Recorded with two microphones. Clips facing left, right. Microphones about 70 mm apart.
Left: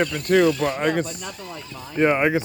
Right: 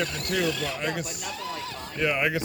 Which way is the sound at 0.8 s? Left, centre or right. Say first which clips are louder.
Left 8 dB; left.